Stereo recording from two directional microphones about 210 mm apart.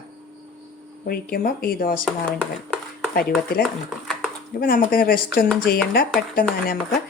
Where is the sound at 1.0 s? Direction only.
45° left (ahead or behind).